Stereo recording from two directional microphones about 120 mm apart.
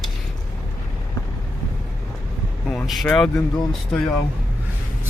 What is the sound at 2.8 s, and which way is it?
Speech, centre (ahead or behind).